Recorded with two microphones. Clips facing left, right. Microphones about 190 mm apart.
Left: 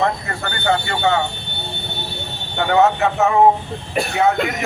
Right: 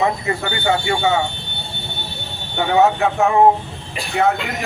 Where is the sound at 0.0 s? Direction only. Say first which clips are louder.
Right 2 dB; 5° right (ahead or behind).